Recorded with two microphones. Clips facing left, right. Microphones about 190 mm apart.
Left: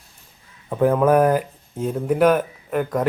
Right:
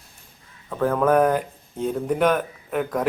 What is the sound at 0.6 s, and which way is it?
Speech, 15° left (ahead or behind).